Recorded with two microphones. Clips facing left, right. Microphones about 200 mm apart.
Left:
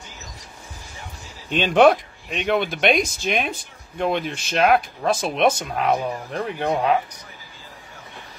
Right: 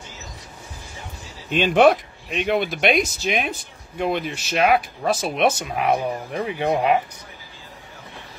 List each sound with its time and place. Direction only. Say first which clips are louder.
1.5 s speech: even; 5° right (ahead or behind)